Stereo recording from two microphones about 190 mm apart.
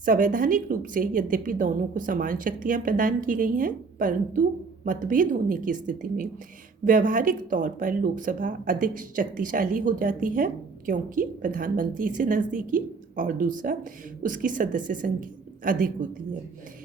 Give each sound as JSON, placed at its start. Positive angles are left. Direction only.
{"t": 0.0, "sound": "speech", "side_deg": -45}